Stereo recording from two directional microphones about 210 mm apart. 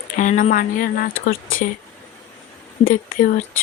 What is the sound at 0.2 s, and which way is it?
Speech, 35° left (ahead or behind).